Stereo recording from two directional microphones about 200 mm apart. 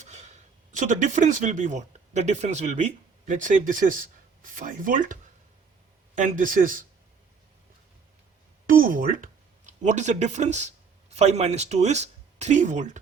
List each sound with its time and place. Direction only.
0.0 s speech: 35° right (ahead or behind)
6.1 s speech: 40° right (ahead or behind)
8.6 s speech: 45° right (ahead or behind)